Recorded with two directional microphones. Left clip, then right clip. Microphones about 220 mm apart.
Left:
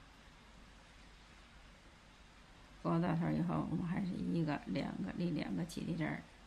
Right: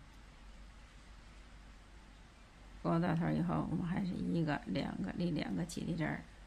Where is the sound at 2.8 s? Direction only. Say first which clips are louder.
Right 2 dB; 20° right (ahead or behind).